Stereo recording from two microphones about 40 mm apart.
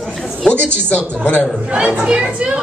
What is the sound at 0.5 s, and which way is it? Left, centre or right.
Speech, left.